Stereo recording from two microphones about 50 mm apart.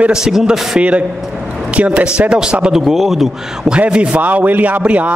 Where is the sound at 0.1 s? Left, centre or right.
Centre.